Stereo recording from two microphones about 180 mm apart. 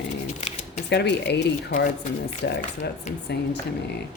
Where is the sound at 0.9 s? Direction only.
70° left (ahead or behind).